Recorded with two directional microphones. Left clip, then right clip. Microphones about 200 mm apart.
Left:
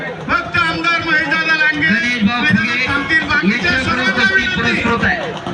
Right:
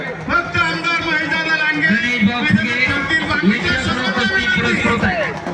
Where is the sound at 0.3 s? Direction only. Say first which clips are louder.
Left 1 dB; 40° left (ahead or behind).